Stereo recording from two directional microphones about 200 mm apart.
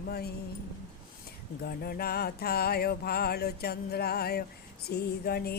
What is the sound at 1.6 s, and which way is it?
Music, 50° left (ahead or behind).